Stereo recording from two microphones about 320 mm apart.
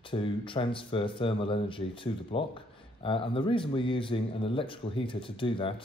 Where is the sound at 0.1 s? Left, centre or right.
Centre.